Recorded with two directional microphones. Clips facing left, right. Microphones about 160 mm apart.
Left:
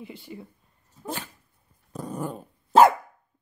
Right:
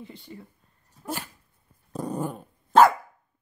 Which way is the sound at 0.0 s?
5° left (ahead or behind).